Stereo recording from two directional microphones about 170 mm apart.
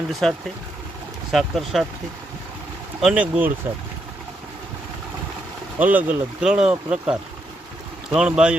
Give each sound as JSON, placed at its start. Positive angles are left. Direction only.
{"t": 0.1, "sound": "speech", "side_deg": 0}
{"t": 3.0, "sound": "speech", "side_deg": -5}
{"t": 5.8, "sound": "speech", "side_deg": -10}